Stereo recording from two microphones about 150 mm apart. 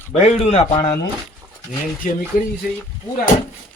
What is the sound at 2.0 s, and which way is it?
Speech, 60° left (ahead or behind).